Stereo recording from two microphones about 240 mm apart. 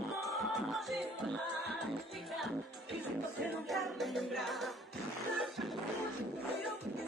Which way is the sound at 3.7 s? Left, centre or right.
Centre.